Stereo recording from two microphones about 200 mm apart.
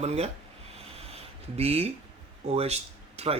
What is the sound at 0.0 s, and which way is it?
Speech, 35° right (ahead or behind).